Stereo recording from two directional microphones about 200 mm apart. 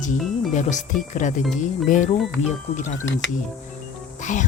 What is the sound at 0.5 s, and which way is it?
Speech, 35° left (ahead or behind).